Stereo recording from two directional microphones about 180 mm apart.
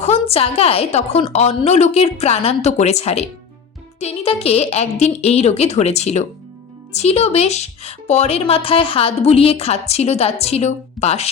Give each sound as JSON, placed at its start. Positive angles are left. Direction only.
{"t": 0.0, "sound": "speech", "side_deg": 35}